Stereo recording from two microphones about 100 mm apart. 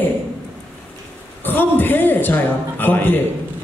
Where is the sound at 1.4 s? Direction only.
20° left (ahead or behind).